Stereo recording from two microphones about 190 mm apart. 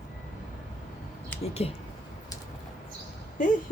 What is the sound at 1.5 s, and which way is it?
Speech, 30° left (ahead or behind).